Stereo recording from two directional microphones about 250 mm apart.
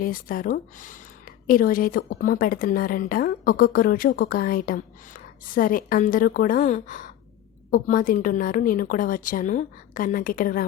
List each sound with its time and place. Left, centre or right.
0.0 s a woman's voice: left